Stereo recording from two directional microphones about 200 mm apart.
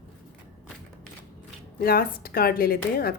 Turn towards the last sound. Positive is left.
turn(degrees=50)  # may be behind; listen again after turning